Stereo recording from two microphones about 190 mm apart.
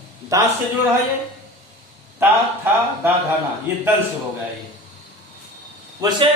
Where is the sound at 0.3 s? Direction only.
15° right (ahead or behind).